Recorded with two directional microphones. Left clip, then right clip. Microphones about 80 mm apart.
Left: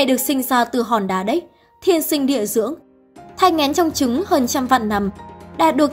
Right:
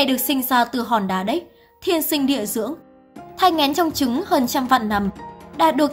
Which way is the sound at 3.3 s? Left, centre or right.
Left.